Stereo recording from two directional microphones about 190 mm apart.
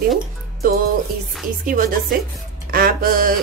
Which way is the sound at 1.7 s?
50° right (ahead or behind).